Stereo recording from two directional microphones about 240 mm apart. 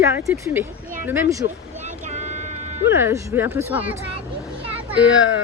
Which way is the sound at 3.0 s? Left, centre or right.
Centre.